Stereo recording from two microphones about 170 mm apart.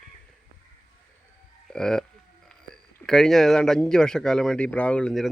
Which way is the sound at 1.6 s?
5° left (ahead or behind).